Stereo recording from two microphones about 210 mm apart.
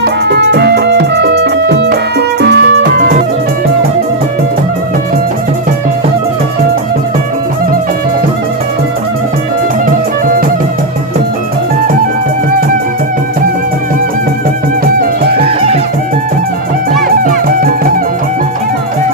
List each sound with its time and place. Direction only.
0.0 s music: 55° right (ahead or behind)
17.2 s music: 40° right (ahead or behind)